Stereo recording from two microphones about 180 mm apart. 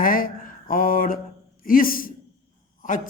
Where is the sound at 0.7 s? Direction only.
50° left (ahead or behind).